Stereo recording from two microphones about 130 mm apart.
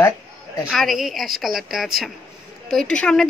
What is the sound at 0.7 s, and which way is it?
A woman's voice, centre (ahead or behind).